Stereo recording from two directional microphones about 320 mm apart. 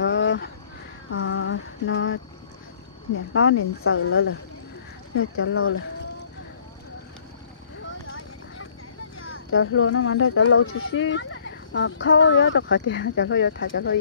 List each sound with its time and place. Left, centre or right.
0.0 s a sound: left
3.3 s speech: left
9.2 s speech: left